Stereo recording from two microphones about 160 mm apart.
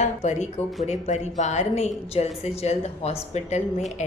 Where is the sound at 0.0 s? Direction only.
45° left (ahead or behind).